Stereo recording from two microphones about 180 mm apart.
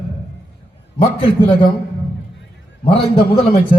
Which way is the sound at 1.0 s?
30° left (ahead or behind).